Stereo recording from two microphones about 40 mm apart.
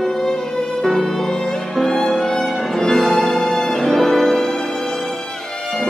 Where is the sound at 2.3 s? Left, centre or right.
Centre.